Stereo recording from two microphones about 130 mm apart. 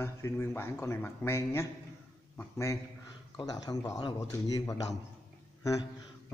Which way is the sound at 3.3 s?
30° left (ahead or behind).